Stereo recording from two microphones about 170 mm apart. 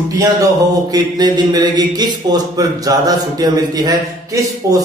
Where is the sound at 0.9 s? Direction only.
25° right (ahead or behind).